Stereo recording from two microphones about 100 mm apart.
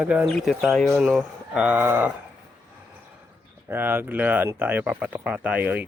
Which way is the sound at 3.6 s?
20° right (ahead or behind).